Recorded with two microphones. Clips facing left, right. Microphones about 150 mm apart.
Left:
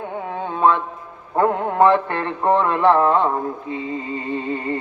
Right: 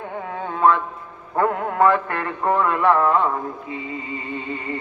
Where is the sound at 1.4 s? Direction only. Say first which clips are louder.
Left 2 dB; 25° left (ahead or behind).